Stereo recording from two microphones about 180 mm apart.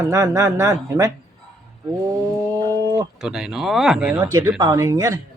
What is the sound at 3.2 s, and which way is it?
Speech, 5° right (ahead or behind).